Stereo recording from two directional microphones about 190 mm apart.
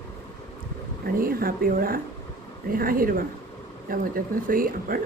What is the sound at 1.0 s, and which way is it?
Speech, 50° right (ahead or behind).